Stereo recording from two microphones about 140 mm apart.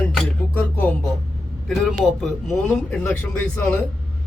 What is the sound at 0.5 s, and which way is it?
Music, 10° left (ahead or behind).